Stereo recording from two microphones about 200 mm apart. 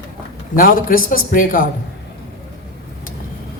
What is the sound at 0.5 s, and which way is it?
A man's voice, 45° left (ahead or behind).